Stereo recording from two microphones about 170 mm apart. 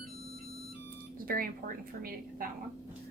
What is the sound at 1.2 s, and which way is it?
Speech, 60° right (ahead or behind).